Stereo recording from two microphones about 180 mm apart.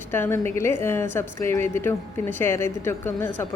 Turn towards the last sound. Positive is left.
turn(degrees=10)  # may be behind; listen again after turning